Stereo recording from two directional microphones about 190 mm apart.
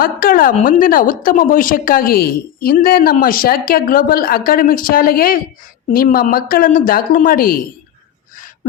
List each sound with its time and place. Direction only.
0.0 s a woman's voice: 50° left (ahead or behind)